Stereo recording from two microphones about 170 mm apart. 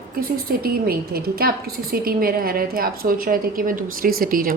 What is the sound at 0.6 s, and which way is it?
A woman's voice, 60° right (ahead or behind).